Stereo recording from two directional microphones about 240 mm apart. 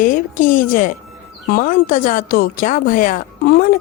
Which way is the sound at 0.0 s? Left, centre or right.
Left.